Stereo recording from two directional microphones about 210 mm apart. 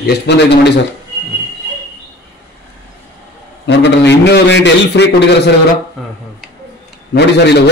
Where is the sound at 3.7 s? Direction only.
55° left (ahead or behind).